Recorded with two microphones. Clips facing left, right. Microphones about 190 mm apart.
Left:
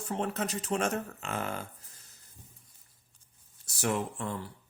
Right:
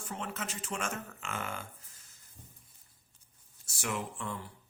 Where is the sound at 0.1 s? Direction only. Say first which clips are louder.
Left 8 dB; 40° left (ahead or behind).